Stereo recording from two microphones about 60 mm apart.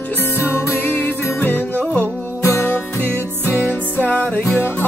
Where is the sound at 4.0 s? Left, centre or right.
Left.